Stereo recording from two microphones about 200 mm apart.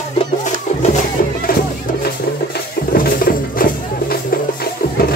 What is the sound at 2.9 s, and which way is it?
Music, 45° left (ahead or behind).